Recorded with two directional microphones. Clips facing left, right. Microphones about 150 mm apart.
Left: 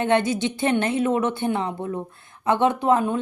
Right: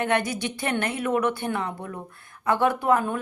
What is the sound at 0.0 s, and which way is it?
Speech, 25° left (ahead or behind).